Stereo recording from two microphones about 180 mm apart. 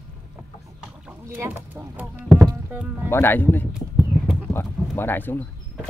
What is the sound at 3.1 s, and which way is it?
Speech, 10° left (ahead or behind).